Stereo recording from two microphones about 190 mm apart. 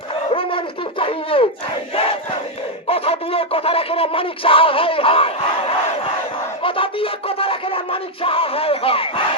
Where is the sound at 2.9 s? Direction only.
30° left (ahead or behind).